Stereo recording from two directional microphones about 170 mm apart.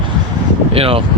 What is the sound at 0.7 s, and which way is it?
Speech, 35° right (ahead or behind).